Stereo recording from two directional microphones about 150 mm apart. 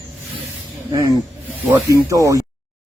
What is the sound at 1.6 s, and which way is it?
Speech, 20° right (ahead or behind).